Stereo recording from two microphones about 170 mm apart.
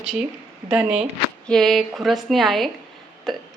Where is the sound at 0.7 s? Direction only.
5° right (ahead or behind).